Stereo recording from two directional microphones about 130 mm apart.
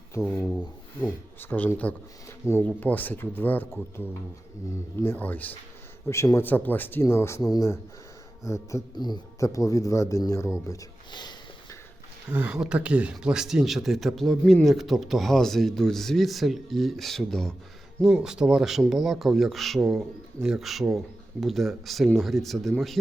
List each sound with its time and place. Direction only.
0.3 s speech: 10° left (ahead or behind)
5.0 s speech: 15° left (ahead or behind)
9.0 s speech: 35° left (ahead or behind)
10.7 s a sound: 30° left (ahead or behind)
12.3 s speech: 10° right (ahead or behind)